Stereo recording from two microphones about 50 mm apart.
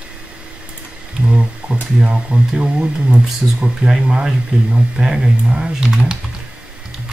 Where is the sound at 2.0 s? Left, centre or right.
Centre.